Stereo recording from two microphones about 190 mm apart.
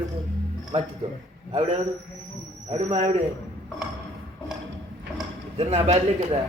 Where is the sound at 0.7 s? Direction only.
30° right (ahead or behind).